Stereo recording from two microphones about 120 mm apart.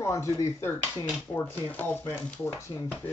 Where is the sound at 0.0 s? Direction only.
25° left (ahead or behind).